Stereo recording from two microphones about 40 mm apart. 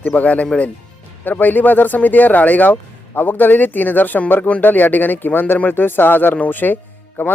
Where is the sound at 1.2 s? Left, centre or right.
Left.